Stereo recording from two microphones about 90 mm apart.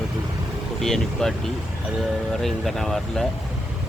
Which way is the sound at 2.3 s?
Centre (ahead or behind).